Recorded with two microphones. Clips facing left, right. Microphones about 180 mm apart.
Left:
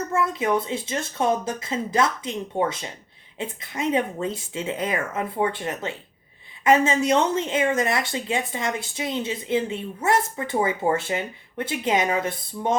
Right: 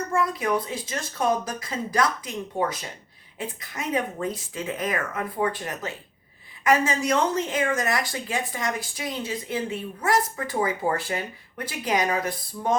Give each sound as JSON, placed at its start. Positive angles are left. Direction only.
{"t": 0.1, "sound": "speech", "side_deg": 25}